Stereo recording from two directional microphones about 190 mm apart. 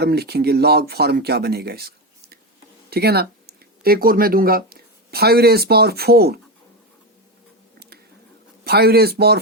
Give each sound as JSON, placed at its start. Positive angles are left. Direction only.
{"t": 0.0, "sound": "speech", "side_deg": -60}
{"t": 2.9, "sound": "speech", "side_deg": -55}
{"t": 7.8, "sound": "a sound", "side_deg": -55}
{"t": 8.6, "sound": "speech", "side_deg": -55}